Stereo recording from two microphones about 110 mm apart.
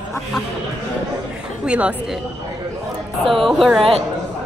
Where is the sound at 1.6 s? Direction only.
10° right (ahead or behind).